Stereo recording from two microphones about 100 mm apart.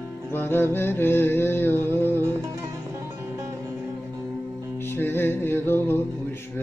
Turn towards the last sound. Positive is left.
turn(degrees=25)  # may be behind; listen again after turning